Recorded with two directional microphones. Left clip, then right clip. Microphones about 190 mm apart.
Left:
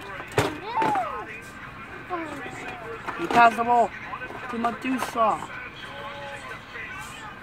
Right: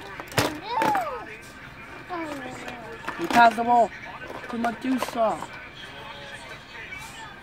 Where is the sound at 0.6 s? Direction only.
50° right (ahead or behind).